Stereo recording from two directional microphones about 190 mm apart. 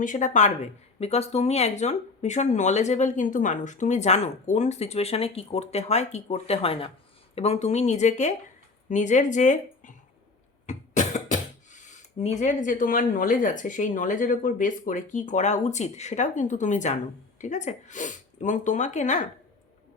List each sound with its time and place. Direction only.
0.0 s speech: 40° left (ahead or behind)